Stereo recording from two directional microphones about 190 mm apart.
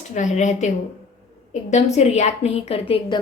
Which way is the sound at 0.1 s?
40° left (ahead or behind).